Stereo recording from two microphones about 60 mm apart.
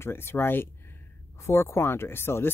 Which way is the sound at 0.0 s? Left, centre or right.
Left.